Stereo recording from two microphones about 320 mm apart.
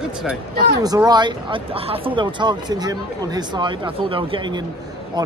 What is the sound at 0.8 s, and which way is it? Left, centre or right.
Speech, centre.